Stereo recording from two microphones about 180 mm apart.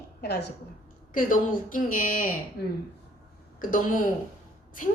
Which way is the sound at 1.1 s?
50° left (ahead or behind).